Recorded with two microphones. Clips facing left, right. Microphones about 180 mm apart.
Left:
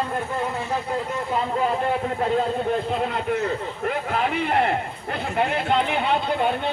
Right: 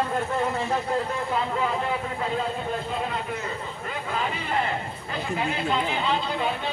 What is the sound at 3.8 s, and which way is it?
Speech, 65° left (ahead or behind).